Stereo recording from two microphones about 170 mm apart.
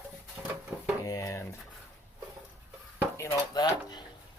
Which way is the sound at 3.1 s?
15° left (ahead or behind).